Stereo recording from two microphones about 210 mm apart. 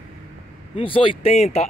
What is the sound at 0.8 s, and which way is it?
Speech, 25° left (ahead or behind).